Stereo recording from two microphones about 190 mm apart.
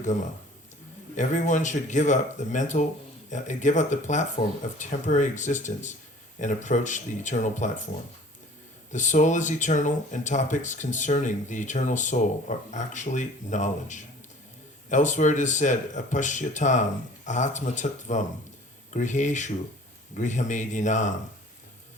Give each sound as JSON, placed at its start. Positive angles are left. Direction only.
{"t": 0.0, "sound": "speech", "side_deg": 40}
{"t": 8.9, "sound": "speech", "side_deg": 40}